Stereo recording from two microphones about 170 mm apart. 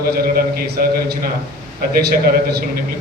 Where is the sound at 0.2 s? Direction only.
65° right (ahead or behind).